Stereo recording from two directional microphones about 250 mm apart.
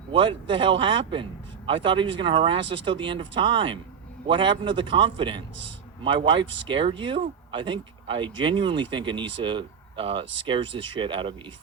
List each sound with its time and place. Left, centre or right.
0.1 s a man's voice: centre